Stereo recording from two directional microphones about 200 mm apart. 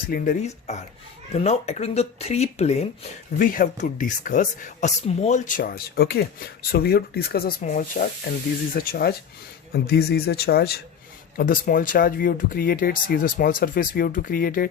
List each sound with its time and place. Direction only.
0.1 s speech: 40° left (ahead or behind)
3.3 s speech: 45° left (ahead or behind)